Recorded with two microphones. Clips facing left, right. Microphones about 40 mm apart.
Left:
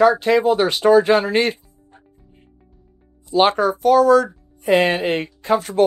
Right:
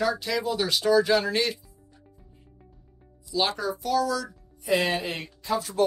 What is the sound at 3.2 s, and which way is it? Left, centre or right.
Speech, left.